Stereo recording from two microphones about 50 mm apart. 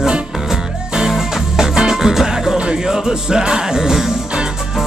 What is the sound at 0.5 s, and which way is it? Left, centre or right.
Music, centre.